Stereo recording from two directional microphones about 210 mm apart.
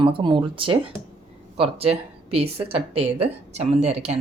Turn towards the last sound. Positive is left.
turn(degrees=-30)  # may be behind; listen again after turning